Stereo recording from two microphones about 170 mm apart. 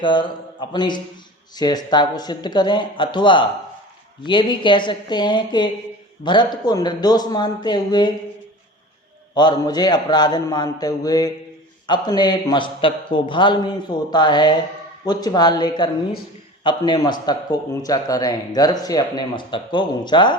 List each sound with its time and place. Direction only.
0.0 s a man's voice: 30° left (ahead or behind)
9.3 s a man's voice: 25° left (ahead or behind)